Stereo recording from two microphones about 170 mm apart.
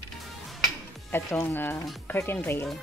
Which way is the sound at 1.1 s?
15° left (ahead or behind).